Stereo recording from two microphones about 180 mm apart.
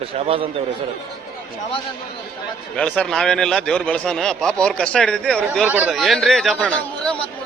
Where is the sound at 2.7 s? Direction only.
5° left (ahead or behind).